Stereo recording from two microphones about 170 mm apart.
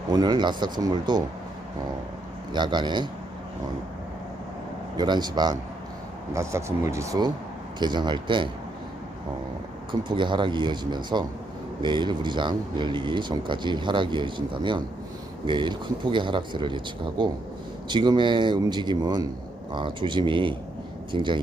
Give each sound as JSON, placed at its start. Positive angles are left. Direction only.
{"t": 0.1, "sound": "speech", "side_deg": -25}
{"t": 2.5, "sound": "speech", "side_deg": -25}
{"t": 4.9, "sound": "speech", "side_deg": -25}
{"t": 10.1, "sound": "speech", "side_deg": -30}